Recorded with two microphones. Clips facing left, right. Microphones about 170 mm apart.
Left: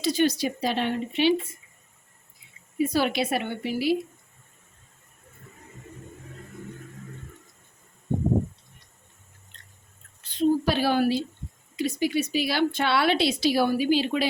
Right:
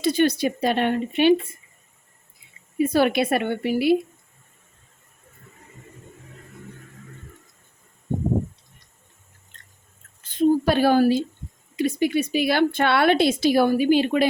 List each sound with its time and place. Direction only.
0.0 s speech: 55° right (ahead or behind)
2.7 s speech: 55° right (ahead or behind)
9.5 s biting: 45° right (ahead or behind)
10.2 s a woman's voice: 50° right (ahead or behind)